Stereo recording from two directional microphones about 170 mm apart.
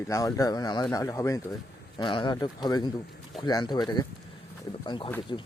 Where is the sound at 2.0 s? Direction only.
30° left (ahead or behind).